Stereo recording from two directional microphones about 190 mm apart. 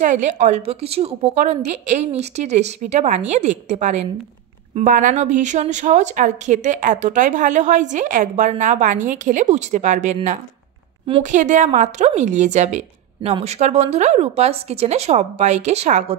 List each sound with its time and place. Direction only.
0.0 s a woman's voice: 40° right (ahead or behind)